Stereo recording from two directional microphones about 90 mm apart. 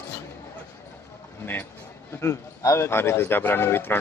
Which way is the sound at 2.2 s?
30° left (ahead or behind).